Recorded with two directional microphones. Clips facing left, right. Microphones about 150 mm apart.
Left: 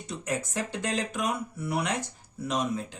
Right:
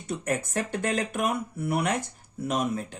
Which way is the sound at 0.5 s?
55° right (ahead or behind).